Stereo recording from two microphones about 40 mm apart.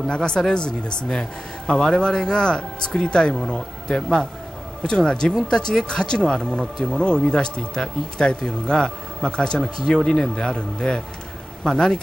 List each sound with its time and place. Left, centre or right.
0.1 s speech: left